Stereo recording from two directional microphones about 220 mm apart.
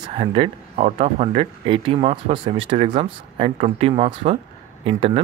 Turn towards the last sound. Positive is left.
turn(degrees=-25)  # may be behind; listen again after turning